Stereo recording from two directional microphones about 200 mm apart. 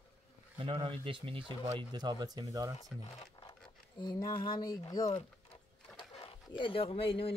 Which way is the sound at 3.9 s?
20° left (ahead or behind).